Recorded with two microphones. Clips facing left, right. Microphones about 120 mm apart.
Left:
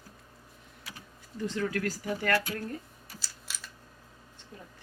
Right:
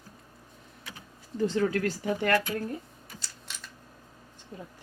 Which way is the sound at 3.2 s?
5° left (ahead or behind).